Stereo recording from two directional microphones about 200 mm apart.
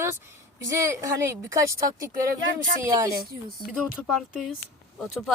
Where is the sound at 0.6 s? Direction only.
15° right (ahead or behind).